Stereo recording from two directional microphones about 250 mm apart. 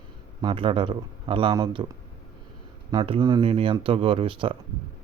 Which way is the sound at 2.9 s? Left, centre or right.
Centre.